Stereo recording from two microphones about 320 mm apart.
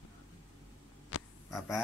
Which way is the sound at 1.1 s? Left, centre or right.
Left.